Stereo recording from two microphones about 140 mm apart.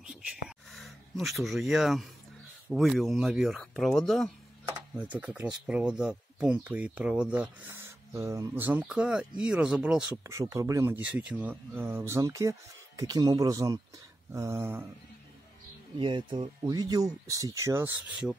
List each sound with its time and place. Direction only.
0.0 s a sound: 5° right (ahead or behind)
2.7 s speech: centre (ahead or behind)
4.9 s speech: 10° right (ahead or behind)
8.6 s speech: 10° right (ahead or behind)
10.2 s speech: 25° right (ahead or behind)
11.0 s speech: 10° right (ahead or behind)
16.0 s speech: 35° right (ahead or behind); by 18.3 s 10° right (ahead or behind)